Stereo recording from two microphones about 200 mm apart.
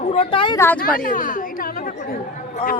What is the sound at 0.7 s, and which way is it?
A woman's voice, 45° left (ahead or behind).